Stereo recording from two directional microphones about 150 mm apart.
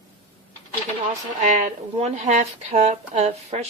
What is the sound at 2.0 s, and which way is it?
Speech, 50° right (ahead or behind).